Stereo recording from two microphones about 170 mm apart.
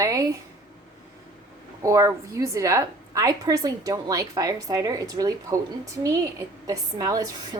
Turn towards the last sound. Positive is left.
turn(degrees=-20)  # may be behind; listen again after turning